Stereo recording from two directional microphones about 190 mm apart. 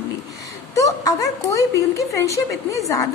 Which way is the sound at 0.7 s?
15° left (ahead or behind).